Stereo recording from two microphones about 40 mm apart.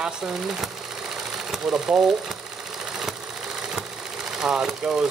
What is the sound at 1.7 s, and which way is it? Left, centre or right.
Speech, centre.